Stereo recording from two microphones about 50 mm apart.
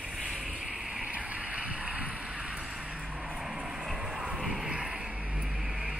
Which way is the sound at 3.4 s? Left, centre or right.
Centre.